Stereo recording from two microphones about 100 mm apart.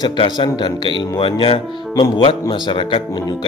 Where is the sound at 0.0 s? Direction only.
50° left (ahead or behind).